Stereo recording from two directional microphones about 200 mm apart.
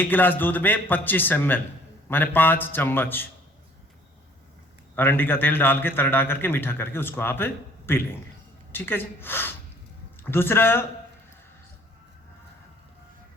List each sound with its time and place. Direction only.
0.0 s a man's voice: 10° left (ahead or behind)
4.9 s a man's voice: 10° left (ahead or behind)